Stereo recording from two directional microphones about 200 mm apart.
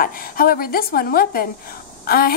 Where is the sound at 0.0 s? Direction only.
45° left (ahead or behind).